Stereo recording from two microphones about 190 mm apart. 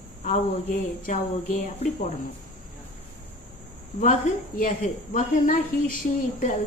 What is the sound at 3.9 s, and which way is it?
A woman's voice, 40° left (ahead or behind).